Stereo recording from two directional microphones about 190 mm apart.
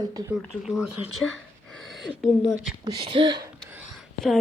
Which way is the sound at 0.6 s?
Centre (ahead or behind).